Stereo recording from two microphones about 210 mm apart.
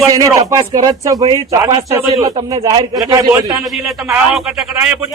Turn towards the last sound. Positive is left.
turn(degrees=-5)  # may be behind; listen again after turning